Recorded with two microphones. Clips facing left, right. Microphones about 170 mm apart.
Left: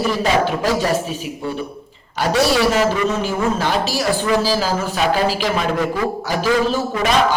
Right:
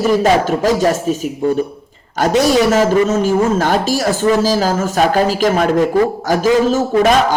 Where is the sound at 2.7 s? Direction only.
45° right (ahead or behind).